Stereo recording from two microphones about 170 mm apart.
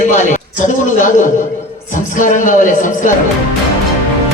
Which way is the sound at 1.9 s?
50° left (ahead or behind).